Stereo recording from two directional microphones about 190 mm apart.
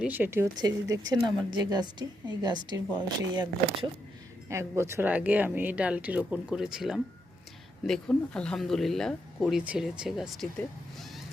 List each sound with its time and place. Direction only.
0.0 s speech: 10° right (ahead or behind)